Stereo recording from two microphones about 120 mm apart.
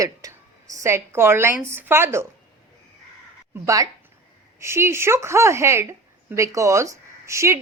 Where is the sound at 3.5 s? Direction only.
25° right (ahead or behind).